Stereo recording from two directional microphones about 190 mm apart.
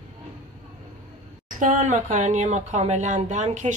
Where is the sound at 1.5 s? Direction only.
45° right (ahead or behind).